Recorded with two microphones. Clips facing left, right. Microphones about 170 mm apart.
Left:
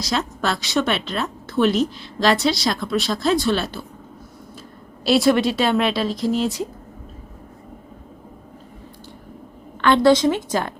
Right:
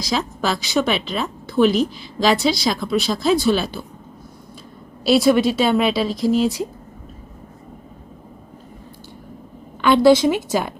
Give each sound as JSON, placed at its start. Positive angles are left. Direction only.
{"t": 0.0, "sound": "a woman's voice", "side_deg": 0}
{"t": 5.0, "sound": "a woman's voice", "side_deg": 0}
{"t": 9.8, "sound": "a woman's voice", "side_deg": -10}